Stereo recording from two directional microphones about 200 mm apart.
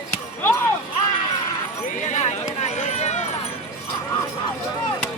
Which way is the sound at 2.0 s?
35° left (ahead or behind).